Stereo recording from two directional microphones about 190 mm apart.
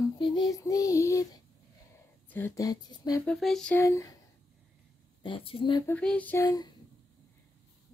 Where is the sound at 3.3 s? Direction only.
Centre (ahead or behind).